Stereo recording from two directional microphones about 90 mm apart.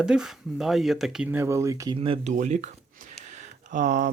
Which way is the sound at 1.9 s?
90° right.